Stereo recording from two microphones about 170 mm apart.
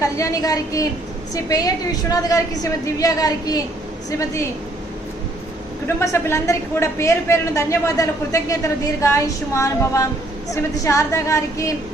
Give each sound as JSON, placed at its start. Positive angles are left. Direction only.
{"t": 0.0, "sound": "a woman's voice", "side_deg": 20}
{"t": 6.0, "sound": "a woman's voice", "side_deg": 15}